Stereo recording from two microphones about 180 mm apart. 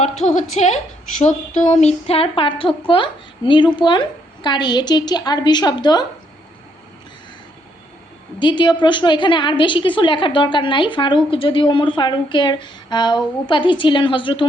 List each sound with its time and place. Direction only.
0.3 s a woman's voice: 40° left (ahead or behind); by 6.1 s 25° left (ahead or behind)
8.4 s a woman's voice: 25° left (ahead or behind)